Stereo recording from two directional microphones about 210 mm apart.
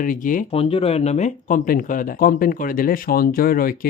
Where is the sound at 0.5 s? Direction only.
25° left (ahead or behind).